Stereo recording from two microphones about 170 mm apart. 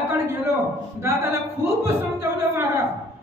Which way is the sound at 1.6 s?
15° right (ahead or behind).